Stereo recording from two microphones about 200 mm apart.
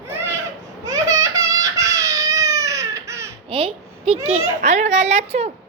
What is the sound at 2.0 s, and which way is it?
Baby cry, 15° right (ahead or behind).